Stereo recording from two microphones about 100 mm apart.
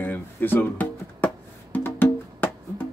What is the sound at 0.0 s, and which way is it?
Music, 20° left (ahead or behind).